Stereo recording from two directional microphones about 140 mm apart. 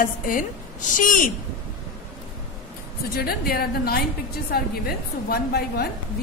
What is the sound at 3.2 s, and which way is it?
A woman's voice, 90° left.